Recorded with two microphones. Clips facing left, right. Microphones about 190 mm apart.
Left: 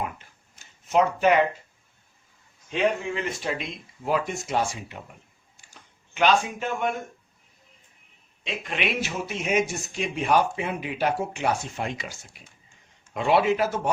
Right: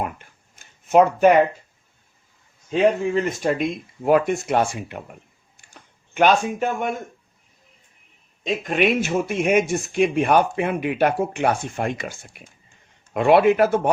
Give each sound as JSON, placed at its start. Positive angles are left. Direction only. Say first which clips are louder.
{"t": 0.9, "sound": "speech", "louder": "right 7 dB", "side_deg": -50}
{"t": 2.6, "sound": "a man's voice", "louder": "right 6 dB", "side_deg": -40}
{"t": 5.5, "sound": "a sound", "louder": "right 4 dB", "side_deg": -50}
{"t": 8.4, "sound": "a man's voice", "louder": "right 9 dB", "side_deg": -45}